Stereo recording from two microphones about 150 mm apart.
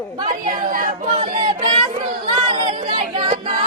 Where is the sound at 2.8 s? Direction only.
35° right (ahead or behind).